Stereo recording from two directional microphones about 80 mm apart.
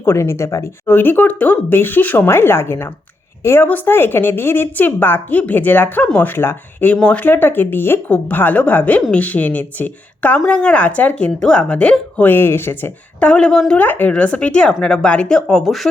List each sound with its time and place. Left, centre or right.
0.0 s speech: left
0.9 s speech: left
13.1 s speech: centre
13.7 s speech: left; by 15.9 s centre